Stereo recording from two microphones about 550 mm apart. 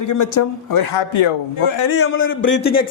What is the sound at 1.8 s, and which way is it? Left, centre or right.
A man's voice, left.